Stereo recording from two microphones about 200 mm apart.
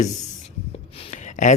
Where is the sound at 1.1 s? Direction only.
35° left (ahead or behind).